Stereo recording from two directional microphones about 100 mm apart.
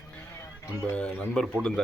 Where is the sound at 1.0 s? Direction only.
10° left (ahead or behind).